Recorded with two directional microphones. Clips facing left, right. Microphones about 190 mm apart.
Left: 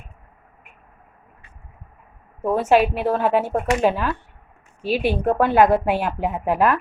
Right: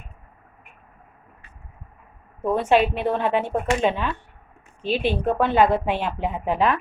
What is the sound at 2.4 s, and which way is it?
A woman's voice, 5° left (ahead or behind).